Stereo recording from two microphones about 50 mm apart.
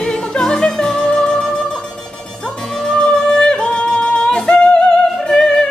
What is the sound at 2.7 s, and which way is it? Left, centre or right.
Yodeling, centre.